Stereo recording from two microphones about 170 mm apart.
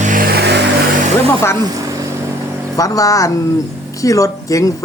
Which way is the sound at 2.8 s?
20° left (ahead or behind).